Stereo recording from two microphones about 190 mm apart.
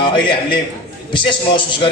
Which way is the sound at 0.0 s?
25° left (ahead or behind).